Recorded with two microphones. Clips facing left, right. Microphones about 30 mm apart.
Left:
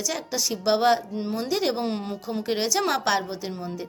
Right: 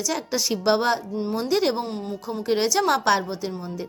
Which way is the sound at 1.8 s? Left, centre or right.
Left.